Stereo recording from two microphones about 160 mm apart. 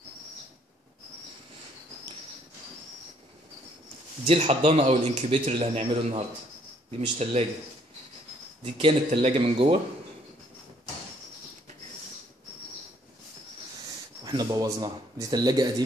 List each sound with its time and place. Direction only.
4.3 s a man's voice: 40° right (ahead or behind)
8.7 s a man's voice: 35° right (ahead or behind)
14.2 s speech: 25° right (ahead or behind)